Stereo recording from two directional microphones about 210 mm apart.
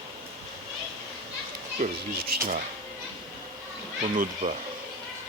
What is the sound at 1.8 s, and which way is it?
Speech, 40° right (ahead or behind).